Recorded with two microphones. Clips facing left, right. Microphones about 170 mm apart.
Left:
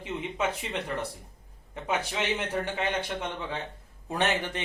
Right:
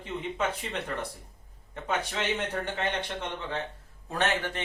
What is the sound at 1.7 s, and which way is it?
A man's voice, 10° left (ahead or behind).